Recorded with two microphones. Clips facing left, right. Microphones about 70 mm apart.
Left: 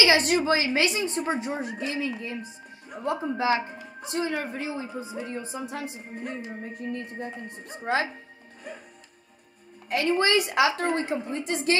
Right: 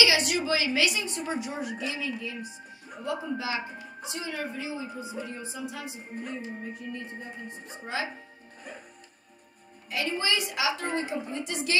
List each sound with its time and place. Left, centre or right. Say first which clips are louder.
0.0 s a woman's voice: left 4 dB; left
9.8 s a woman's voice: left 6 dB; left